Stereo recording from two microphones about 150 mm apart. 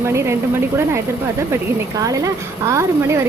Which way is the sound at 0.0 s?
15° right (ahead or behind).